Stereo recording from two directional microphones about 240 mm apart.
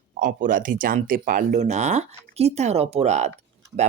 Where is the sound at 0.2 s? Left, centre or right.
Right.